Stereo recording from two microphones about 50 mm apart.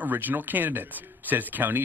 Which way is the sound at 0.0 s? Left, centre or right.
Right.